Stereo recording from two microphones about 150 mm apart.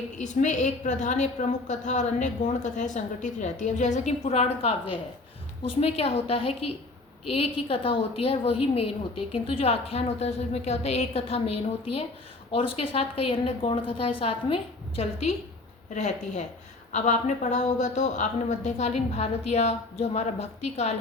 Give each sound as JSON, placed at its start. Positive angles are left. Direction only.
{"t": 0.2, "sound": "a woman's voice", "side_deg": 55}